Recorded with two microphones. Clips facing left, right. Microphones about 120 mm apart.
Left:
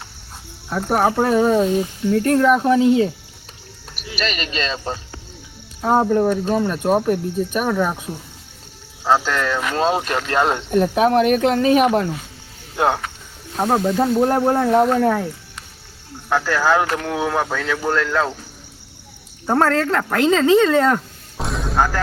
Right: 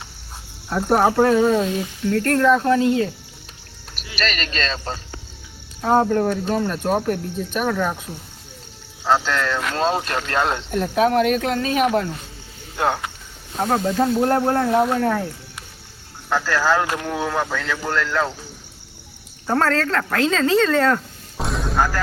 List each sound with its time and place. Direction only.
0.7 s speech: centre (ahead or behind); by 3.1 s 15° left (ahead or behind)
4.2 s speech: 10° left (ahead or behind)
9.0 s speech: 10° left (ahead or behind)
13.6 s speech: 10° left (ahead or behind)
14.7 s speech: centre (ahead or behind)
16.3 s speech: 15° left (ahead or behind)
19.5 s speech: 15° left (ahead or behind)
21.3 s music: centre (ahead or behind)